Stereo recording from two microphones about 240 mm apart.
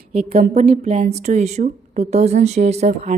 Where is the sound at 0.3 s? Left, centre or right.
Right.